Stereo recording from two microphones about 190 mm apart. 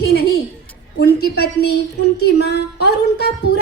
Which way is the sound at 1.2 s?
60° left (ahead or behind).